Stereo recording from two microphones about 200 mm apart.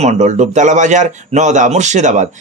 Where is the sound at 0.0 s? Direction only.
35° right (ahead or behind).